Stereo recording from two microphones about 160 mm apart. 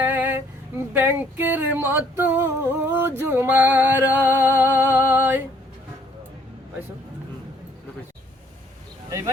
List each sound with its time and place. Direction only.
0.0 s a sound: 10° right (ahead or behind)
0.9 s female singing: 10° right (ahead or behind)
9.0 s speech: 20° right (ahead or behind)